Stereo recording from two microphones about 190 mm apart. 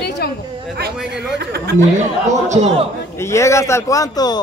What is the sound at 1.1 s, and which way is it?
Speech, 60° right (ahead or behind).